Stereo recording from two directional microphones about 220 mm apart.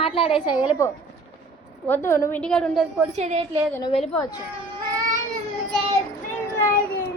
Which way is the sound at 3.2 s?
30° right (ahead or behind).